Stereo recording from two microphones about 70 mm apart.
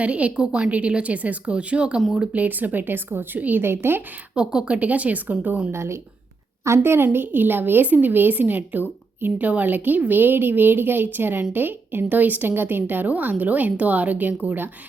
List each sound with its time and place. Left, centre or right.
0.0 s a woman's voice: centre; by 4.0 s right
4.4 s a woman's voice: centre
5.7 s a woman's voice: right